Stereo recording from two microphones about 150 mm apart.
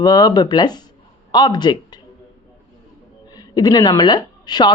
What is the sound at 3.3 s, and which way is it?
A woman's voice, 25° left (ahead or behind).